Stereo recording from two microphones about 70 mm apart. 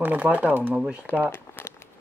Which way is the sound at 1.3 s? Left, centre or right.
Left.